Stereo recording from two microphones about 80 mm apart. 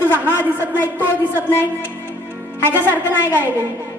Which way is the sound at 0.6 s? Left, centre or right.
Right.